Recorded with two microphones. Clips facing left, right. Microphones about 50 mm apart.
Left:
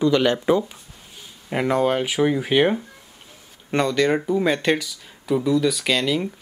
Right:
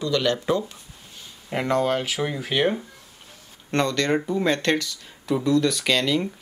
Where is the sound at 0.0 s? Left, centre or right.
Left.